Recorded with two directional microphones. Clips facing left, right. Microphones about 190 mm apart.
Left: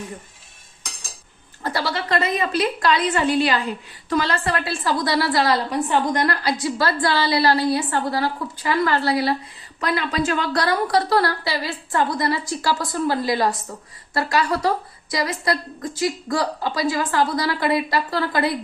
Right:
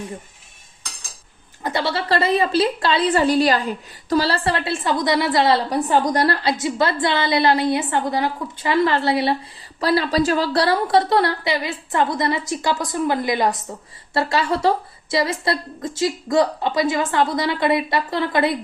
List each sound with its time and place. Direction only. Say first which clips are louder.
1.6 s a woman's voice: right 2 dB; 25° right (ahead or behind)
9.8 s a woman's voice: right 4 dB; 35° right (ahead or behind)